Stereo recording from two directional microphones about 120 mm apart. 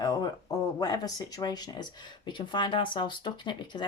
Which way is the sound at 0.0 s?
35° left (ahead or behind).